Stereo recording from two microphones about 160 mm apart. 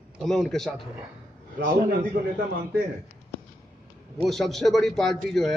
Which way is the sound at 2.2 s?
60° right (ahead or behind).